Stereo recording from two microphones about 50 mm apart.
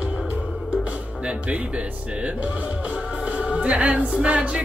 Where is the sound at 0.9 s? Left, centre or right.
Right.